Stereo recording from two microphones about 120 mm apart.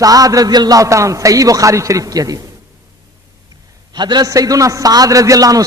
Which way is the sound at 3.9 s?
35° right (ahead or behind).